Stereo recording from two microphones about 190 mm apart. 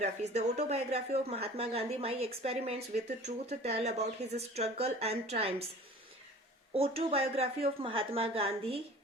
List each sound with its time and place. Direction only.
0.0 s speech: 35° right (ahead or behind)
6.7 s speech: 30° right (ahead or behind)